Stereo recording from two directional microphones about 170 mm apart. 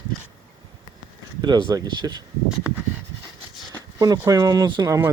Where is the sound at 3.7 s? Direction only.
20° right (ahead or behind).